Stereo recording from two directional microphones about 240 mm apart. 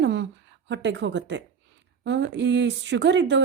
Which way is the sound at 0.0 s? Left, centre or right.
Right.